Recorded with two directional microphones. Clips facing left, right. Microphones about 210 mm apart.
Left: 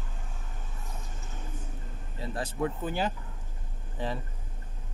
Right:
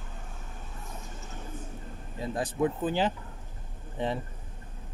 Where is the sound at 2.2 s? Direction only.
15° right (ahead or behind).